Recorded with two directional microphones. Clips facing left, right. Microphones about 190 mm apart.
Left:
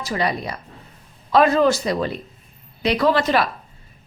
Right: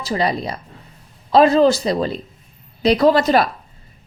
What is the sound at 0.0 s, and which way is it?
A woman's voice, 30° right (ahead or behind).